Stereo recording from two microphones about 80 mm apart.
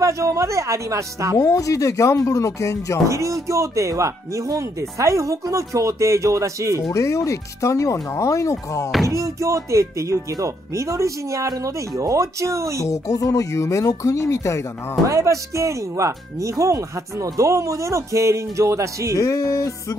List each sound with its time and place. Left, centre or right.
0.0 s speech: right
1.4 s speech: left
3.1 s speech: right
6.9 s speech: left
9.1 s speech: right
12.8 s speech: left
15.0 s speech: right
19.1 s speech: left